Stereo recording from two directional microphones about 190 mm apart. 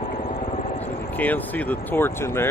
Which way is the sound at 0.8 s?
10° left (ahead or behind).